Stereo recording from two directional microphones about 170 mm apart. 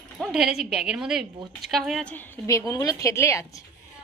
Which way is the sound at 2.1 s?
15° left (ahead or behind).